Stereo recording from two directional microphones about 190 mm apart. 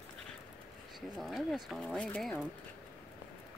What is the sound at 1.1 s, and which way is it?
Speech, centre (ahead or behind).